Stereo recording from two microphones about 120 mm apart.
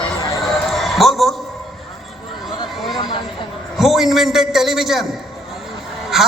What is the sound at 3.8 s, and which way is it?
A man's voice, centre (ahead or behind).